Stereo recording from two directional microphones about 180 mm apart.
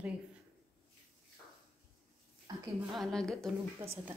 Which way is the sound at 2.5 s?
20° right (ahead or behind).